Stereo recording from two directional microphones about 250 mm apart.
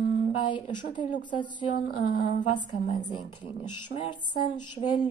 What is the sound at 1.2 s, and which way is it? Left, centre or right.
Speech, centre.